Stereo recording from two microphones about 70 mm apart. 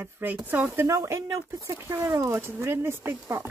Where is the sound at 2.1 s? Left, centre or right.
Right.